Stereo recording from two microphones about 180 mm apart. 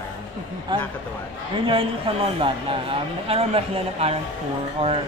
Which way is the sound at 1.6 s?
30° right (ahead or behind).